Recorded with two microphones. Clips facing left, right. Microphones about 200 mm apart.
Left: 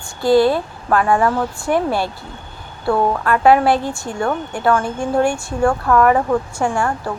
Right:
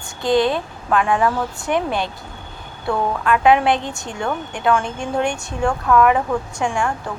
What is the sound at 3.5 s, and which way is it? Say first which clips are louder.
Speech: left 3 dB; 20° right (ahead or behind).